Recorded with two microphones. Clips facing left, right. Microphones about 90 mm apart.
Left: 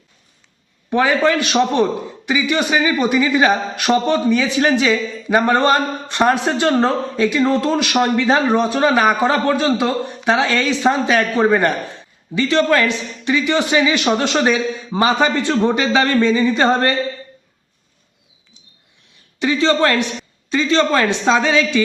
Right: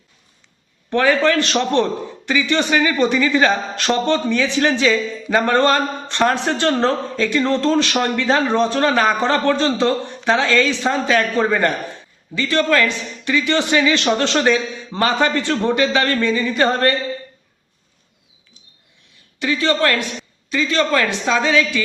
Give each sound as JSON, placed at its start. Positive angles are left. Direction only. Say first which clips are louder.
{"t": 0.9, "sound": "a man's voice", "louder": "even", "side_deg": 15}
{"t": 19.4, "sound": "speech", "louder": "left 3 dB", "side_deg": 20}